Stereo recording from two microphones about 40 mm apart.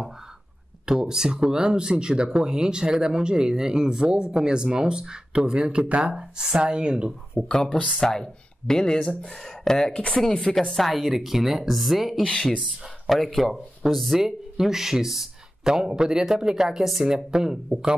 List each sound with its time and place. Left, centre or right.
0.8 s speech: centre
7.4 s speech: centre
10.7 s a woman's voice: centre
12.2 s speech: centre
13.0 s a woman's voice: centre
14.2 s speech: centre